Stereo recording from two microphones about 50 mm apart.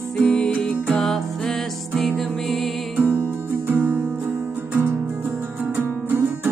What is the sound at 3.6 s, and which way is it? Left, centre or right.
Music, right.